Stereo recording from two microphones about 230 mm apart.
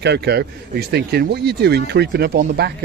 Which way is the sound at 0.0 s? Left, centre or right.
Right.